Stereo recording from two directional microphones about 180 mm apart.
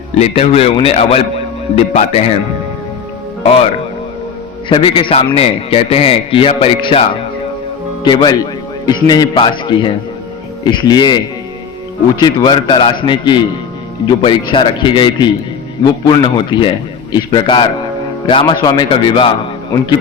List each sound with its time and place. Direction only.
0.2 s a man's voice: 35° left (ahead or behind)
3.4 s speech: 35° left (ahead or behind)
4.7 s a man's voice: 30° left (ahead or behind)
8.0 s a man's voice: 25° left (ahead or behind)
12.2 s a man's voice: 25° left (ahead or behind)